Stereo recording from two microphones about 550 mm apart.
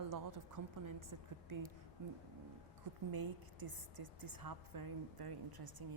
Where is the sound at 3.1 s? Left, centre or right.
Right.